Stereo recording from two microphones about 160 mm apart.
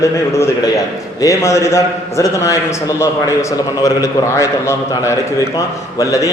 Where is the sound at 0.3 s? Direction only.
15° left (ahead or behind).